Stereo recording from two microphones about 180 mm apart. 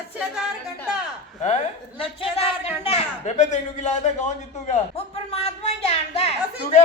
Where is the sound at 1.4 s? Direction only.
35° left (ahead or behind).